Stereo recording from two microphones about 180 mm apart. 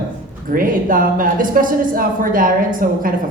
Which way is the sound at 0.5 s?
50° right (ahead or behind).